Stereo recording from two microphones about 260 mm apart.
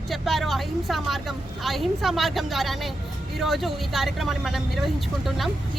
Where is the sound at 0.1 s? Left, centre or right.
Centre.